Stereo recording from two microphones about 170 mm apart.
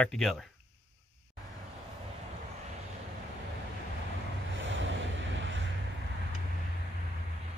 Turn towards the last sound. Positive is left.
turn(degrees=-90)